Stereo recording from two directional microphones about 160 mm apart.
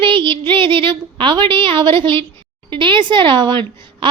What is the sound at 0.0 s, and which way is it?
A woman's voice, 30° right (ahead or behind).